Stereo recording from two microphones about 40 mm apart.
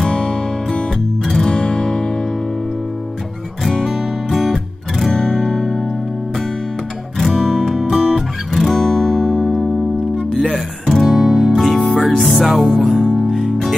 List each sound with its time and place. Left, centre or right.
0.1 s music: left
1.2 s music: centre
1.5 s music: left
3.9 s music: centre
7.2 s music: centre